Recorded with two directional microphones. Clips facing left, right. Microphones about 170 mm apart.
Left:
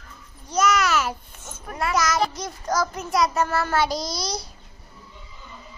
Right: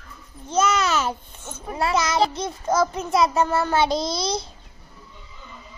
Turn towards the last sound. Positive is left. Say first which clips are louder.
# right 4 dB
turn(degrees=-25)  # may be behind; listen again after turning